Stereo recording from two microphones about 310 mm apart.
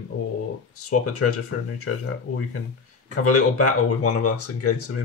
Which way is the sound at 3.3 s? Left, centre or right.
Left.